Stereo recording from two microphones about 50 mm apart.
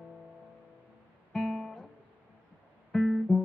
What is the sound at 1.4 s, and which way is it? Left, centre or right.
Music, centre.